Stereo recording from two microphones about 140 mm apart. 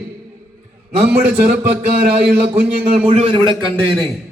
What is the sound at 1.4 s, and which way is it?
Speech, 90° right.